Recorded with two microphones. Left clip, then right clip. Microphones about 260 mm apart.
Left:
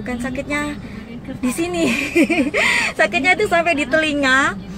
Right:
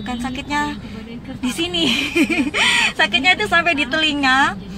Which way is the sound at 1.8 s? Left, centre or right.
Centre.